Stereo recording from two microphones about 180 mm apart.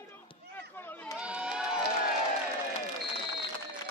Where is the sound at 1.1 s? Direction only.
5° right (ahead or behind).